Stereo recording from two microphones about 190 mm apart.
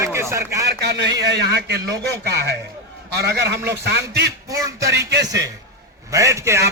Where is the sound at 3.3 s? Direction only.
60° right (ahead or behind).